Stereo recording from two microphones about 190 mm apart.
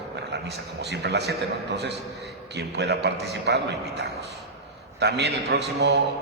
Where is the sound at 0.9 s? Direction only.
60° right (ahead or behind).